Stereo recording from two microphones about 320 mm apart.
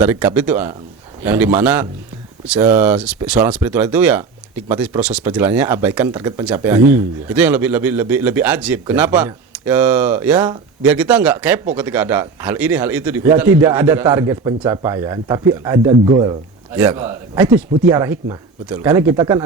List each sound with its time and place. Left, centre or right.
0.0 s a man's voice: centre